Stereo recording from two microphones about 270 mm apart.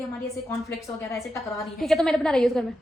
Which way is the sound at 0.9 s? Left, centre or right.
Centre.